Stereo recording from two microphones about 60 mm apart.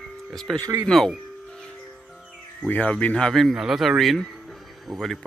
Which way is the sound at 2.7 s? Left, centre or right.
Left.